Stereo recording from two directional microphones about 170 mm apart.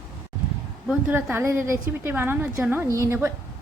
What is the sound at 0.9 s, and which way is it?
A woman's voice, 5° right (ahead or behind).